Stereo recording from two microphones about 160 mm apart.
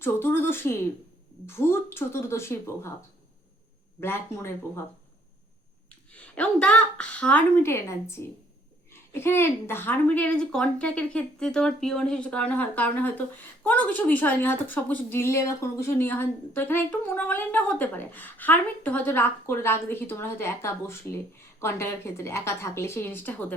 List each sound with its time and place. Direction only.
0.0 s a woman's voice: 15° left (ahead or behind)
4.0 s a woman's voice: 15° left (ahead or behind)
6.1 s a woman's voice: 5° left (ahead or behind)